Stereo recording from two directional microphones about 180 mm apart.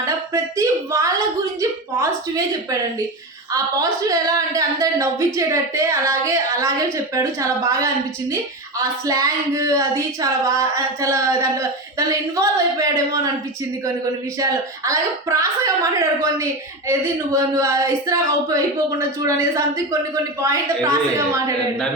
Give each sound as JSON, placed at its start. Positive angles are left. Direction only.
{"t": 0.5, "sound": "a sound", "side_deg": -15}
{"t": 3.5, "sound": "speech", "side_deg": -20}
{"t": 14.3, "sound": "speech", "side_deg": -20}